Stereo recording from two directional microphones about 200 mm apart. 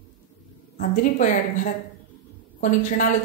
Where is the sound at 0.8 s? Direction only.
40° left (ahead or behind).